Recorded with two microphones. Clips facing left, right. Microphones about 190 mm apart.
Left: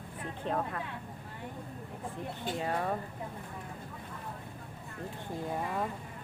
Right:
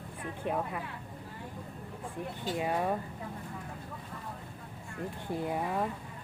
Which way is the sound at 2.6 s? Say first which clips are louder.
Right 3 dB; 15° right (ahead or behind).